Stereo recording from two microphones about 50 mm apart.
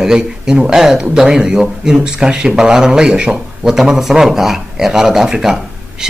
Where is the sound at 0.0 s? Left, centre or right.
Centre.